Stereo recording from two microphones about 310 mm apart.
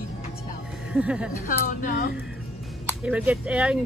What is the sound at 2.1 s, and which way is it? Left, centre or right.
Music, centre.